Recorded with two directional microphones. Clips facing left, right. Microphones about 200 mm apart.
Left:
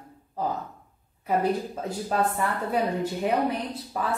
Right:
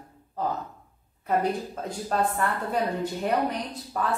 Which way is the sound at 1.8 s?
5° left (ahead or behind).